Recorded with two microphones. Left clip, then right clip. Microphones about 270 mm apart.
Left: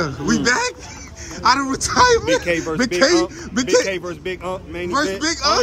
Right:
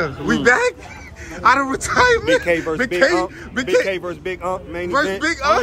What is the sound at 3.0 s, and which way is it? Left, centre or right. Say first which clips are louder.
Speech: left 1 dB; left.